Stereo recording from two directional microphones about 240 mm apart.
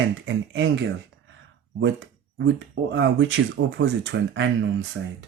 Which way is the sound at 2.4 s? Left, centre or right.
Right.